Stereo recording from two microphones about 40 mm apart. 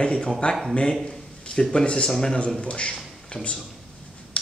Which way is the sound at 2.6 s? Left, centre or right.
Left.